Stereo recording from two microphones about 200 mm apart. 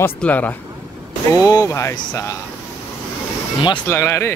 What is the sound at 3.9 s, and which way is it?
Speech, 10° left (ahead or behind).